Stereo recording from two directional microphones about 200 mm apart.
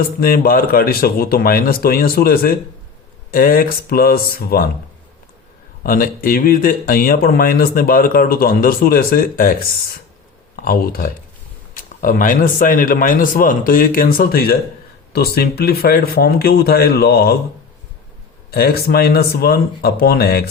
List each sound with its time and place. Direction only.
0.2 s speech: 45° left (ahead or behind)
5.8 s speech: 45° left (ahead or behind)
10.6 s speech: 45° left (ahead or behind)
18.5 s speech: 50° left (ahead or behind)